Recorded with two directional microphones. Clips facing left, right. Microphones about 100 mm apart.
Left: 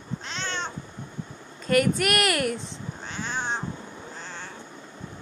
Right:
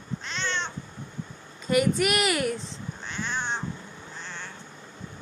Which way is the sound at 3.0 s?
35° left (ahead or behind).